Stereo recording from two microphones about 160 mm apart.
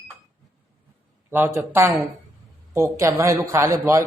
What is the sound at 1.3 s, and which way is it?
Speech, 15° right (ahead or behind).